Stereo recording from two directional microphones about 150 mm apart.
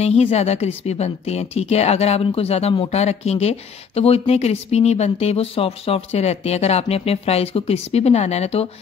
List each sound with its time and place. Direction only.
0.0 s speech: 45° left (ahead or behind)